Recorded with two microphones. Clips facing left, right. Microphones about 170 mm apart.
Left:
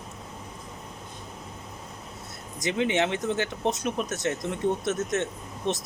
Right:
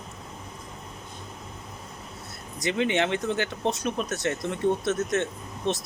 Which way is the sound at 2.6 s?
20° left (ahead or behind).